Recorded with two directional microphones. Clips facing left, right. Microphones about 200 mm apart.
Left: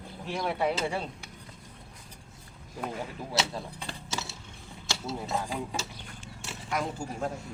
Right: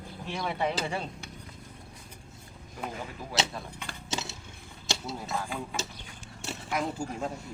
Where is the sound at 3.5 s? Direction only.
30° left (ahead or behind).